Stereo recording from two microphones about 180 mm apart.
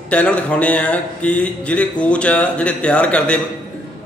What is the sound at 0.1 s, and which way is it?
A man's voice, 5° left (ahead or behind).